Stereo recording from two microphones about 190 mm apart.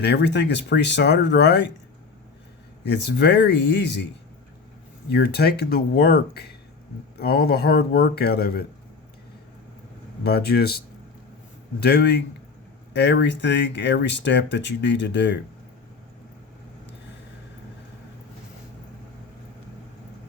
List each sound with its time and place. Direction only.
0.0 s speech: 60° left (ahead or behind)
2.8 s speech: 65° left (ahead or behind)
5.0 s speech: 60° left (ahead or behind)
10.2 s speech: 55° left (ahead or behind)
11.8 s speech: 60° left (ahead or behind)